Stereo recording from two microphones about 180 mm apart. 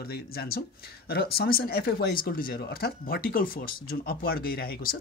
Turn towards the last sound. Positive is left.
turn(degrees=55)  # may be behind; listen again after turning